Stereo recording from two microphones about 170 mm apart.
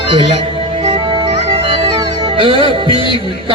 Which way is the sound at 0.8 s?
30° right (ahead or behind).